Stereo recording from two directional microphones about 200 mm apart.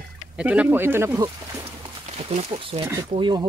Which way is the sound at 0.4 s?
5° right (ahead or behind).